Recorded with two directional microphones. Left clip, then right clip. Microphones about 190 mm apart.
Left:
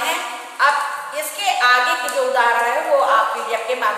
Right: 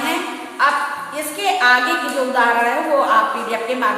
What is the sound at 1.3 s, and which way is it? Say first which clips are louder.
A woman's voice: right 1 dB; centre (ahead or behind).